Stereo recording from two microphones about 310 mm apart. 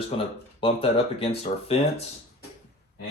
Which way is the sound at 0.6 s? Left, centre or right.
Centre.